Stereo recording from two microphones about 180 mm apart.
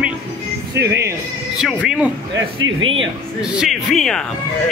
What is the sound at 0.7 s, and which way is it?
Speech, 70° right (ahead or behind).